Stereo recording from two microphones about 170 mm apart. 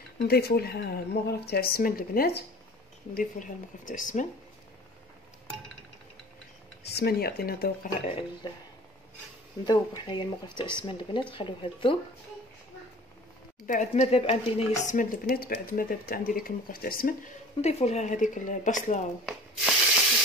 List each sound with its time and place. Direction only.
0.3 s speech: 70° left (ahead or behind)
3.2 s speech: 50° left (ahead or behind)
6.9 s speech: 70° left (ahead or behind)
9.7 s speech: 30° left (ahead or behind)
13.7 s speech: 45° left (ahead or behind)
17.6 s speech: 40° left (ahead or behind)
19.2 s spray: 5° right (ahead or behind)